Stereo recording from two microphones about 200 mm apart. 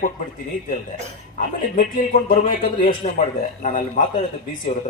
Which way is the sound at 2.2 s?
45° left (ahead or behind).